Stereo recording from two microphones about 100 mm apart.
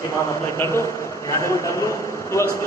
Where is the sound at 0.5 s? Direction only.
25° left (ahead or behind).